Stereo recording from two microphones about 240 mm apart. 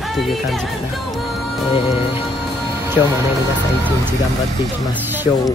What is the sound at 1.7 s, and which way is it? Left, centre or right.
Music, left.